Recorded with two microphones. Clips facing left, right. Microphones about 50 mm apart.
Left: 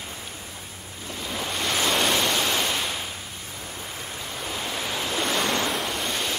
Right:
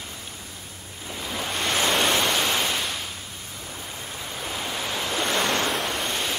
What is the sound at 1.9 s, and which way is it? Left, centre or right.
Pink noise, centre.